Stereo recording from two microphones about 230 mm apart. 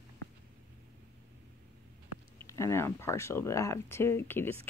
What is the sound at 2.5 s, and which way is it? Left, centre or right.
Speech, centre.